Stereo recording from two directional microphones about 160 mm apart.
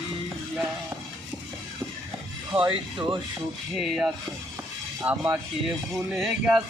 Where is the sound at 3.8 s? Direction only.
Centre (ahead or behind).